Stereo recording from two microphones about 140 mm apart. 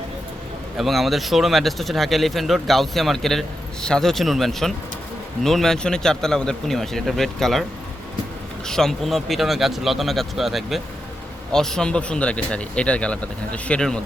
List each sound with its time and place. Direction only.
0.8 s a man's voice: centre (ahead or behind)
8.6 s a man's voice: 5° left (ahead or behind)